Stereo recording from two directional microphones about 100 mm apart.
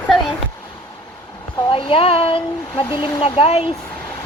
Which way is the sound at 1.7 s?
65° left (ahead or behind).